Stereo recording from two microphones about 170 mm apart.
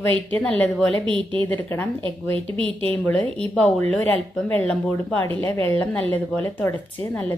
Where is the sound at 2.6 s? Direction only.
30° right (ahead or behind).